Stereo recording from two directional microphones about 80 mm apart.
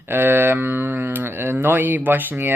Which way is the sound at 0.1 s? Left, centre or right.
Right.